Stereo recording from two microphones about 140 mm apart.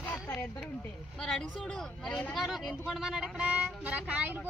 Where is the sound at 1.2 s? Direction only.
5° left (ahead or behind).